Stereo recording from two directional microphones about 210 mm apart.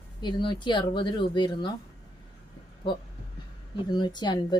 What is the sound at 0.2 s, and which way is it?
Speech, 20° left (ahead or behind).